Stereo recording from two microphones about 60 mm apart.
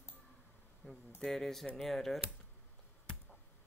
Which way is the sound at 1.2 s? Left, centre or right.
Centre.